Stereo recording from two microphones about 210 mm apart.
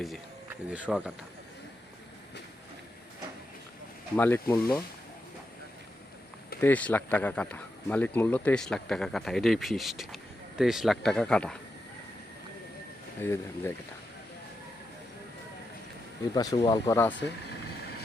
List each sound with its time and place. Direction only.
0.7 s speech: 5° right (ahead or behind)
4.2 s speech: 10° left (ahead or behind)
6.6 s speech: 10° left (ahead or behind)
13.2 s speech: 10° left (ahead or behind)
16.3 s speech: 20° left (ahead or behind)